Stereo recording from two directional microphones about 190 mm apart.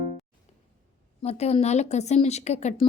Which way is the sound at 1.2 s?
35° left (ahead or behind).